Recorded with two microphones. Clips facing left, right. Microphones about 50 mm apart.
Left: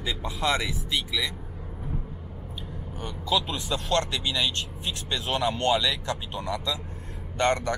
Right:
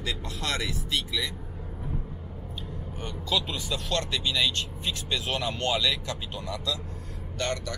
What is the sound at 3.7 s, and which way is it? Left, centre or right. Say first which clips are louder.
Speech: left 4 dB; left.